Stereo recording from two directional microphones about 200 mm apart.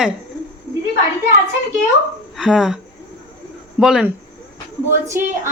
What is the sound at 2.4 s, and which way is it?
Speech, centre (ahead or behind).